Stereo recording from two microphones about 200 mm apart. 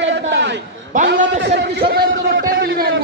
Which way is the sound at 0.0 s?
60° right (ahead or behind).